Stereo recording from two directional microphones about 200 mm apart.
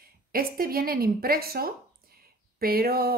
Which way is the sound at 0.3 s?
45° right (ahead or behind).